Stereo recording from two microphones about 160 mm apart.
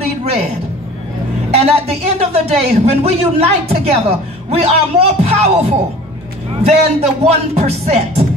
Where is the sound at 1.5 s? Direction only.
40° right (ahead or behind).